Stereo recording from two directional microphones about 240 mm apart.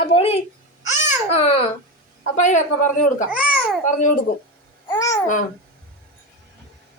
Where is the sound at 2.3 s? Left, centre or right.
Left.